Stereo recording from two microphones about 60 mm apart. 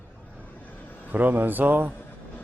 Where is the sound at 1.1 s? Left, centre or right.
Right.